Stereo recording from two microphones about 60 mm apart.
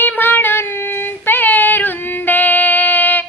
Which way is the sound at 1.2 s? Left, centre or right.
Left.